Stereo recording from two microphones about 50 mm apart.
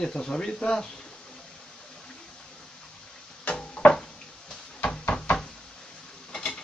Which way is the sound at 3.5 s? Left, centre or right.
Left.